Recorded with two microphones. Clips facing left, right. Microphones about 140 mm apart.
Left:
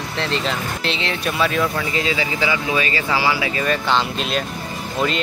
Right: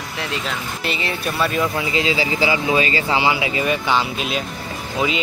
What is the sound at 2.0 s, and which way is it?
Speech, 30° right (ahead or behind).